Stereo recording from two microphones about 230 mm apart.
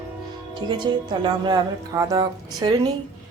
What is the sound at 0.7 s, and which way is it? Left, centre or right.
Speech, centre.